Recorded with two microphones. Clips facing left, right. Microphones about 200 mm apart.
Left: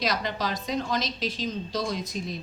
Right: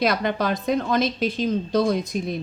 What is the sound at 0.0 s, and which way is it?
A woman's voice, 55° right (ahead or behind).